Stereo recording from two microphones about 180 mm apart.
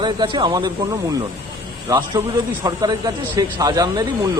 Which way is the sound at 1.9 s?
20° right (ahead or behind).